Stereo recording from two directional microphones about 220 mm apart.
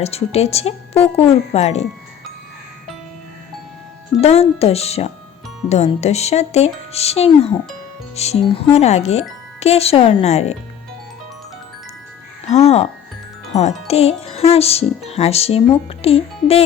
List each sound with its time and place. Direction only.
0.0 s speech: 30° left (ahead or behind)
4.2 s speech: 30° left (ahead or behind)
12.5 s speech: 30° left (ahead or behind)